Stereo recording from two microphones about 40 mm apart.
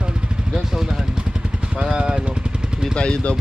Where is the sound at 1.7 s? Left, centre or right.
Right.